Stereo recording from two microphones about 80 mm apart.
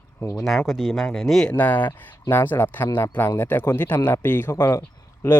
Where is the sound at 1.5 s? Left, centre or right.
Left.